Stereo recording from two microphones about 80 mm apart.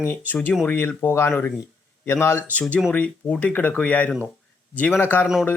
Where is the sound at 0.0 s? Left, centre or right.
Left.